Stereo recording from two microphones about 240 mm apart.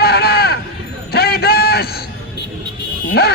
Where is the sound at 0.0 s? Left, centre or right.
Left.